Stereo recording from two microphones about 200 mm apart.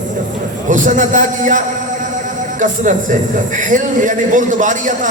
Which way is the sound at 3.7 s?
40° right (ahead or behind).